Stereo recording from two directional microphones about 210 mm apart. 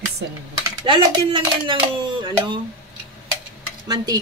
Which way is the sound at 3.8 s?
20° right (ahead or behind).